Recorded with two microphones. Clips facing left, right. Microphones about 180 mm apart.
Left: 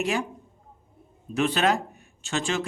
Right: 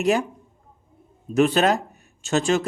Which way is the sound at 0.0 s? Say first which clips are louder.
Right 6 dB; 40° right (ahead or behind).